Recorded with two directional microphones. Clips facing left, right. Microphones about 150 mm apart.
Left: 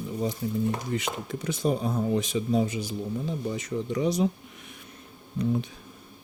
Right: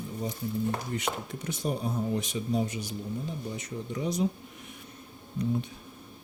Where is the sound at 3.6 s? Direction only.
90° left.